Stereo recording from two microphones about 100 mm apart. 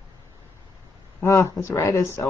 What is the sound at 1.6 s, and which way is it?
Speech, 25° left (ahead or behind).